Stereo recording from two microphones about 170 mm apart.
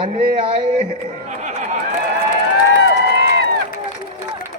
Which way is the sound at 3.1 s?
75° right (ahead or behind).